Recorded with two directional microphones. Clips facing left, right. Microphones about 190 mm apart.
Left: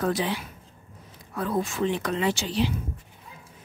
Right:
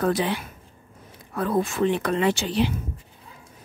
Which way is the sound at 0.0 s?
60° right (ahead or behind).